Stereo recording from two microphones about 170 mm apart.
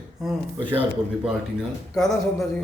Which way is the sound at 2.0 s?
Centre (ahead or behind).